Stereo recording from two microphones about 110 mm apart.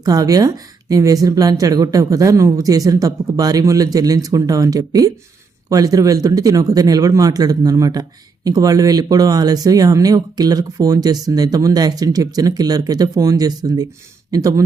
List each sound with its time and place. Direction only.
0.0 s speech: 35° right (ahead or behind)